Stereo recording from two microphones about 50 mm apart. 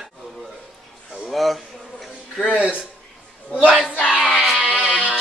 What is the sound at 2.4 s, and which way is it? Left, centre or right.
Speech, centre.